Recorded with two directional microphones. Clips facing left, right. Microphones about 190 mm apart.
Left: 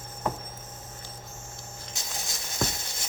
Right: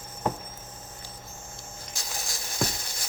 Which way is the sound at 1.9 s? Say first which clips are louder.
Right 1 dB; 20° left (ahead or behind).